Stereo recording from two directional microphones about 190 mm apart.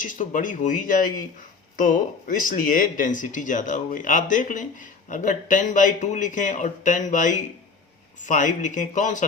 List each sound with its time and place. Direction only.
0.1 s speech: 45° left (ahead or behind)